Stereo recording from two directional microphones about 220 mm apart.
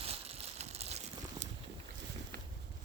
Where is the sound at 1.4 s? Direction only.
35° right (ahead or behind).